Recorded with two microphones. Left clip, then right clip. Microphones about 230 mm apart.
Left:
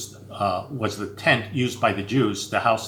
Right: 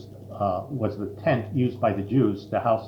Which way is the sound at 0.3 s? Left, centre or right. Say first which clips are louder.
Left 2 dB; left.